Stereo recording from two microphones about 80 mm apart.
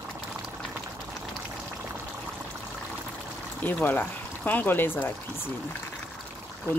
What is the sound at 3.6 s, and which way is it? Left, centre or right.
Speech, left.